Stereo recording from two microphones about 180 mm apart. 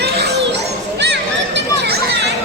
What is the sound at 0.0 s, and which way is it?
Children playing, 65° right (ahead or behind).